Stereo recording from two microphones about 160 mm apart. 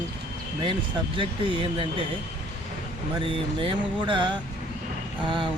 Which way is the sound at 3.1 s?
30° right (ahead or behind).